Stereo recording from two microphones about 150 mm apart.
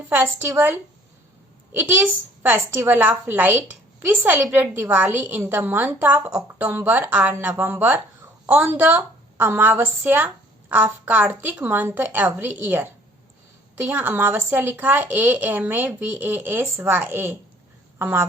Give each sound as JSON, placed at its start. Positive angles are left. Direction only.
{"t": 0.1, "sound": "a woman's voice", "side_deg": -15}